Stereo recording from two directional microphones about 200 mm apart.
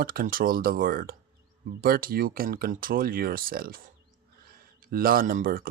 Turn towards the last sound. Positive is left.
turn(degrees=-45)  # may be behind; listen again after turning